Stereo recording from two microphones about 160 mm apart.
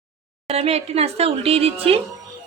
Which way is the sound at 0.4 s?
40° right (ahead or behind).